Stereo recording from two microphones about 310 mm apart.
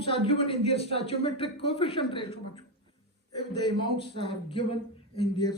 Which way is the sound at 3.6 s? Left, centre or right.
Centre.